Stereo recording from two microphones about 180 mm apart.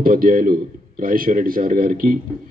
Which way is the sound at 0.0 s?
55° right (ahead or behind).